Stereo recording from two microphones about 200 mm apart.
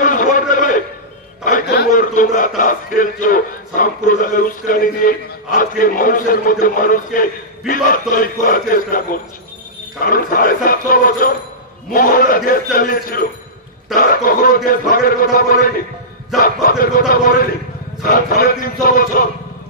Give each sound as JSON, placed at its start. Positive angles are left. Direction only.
{"t": 0.0, "sound": "a sound", "side_deg": 40}
{"t": 1.4, "sound": "a man's voice", "side_deg": 45}
{"t": 10.0, "sound": "a man's voice", "side_deg": 45}